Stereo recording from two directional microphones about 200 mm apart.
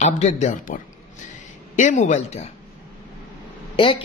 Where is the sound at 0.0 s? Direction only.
35° left (ahead or behind).